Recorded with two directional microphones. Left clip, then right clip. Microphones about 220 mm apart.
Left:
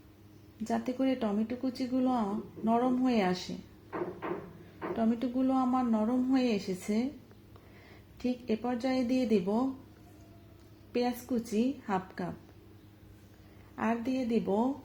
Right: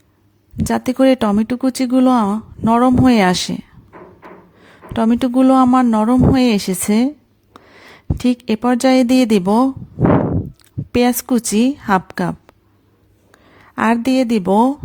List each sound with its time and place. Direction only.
0.5 s speech: 45° right (ahead or behind)
4.9 s speech: 50° right (ahead or behind)
8.2 s speech: 45° right (ahead or behind)
10.9 s speech: 45° right (ahead or behind)
13.7 s speech: 45° right (ahead or behind)